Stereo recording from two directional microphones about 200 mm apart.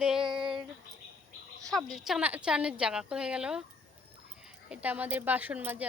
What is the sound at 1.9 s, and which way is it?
Speech, centre (ahead or behind).